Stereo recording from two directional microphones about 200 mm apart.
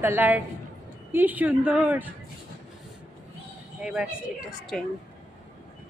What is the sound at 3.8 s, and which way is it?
Speech, 5° right (ahead or behind).